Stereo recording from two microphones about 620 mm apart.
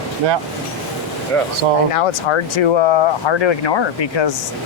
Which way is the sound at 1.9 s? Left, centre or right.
Left.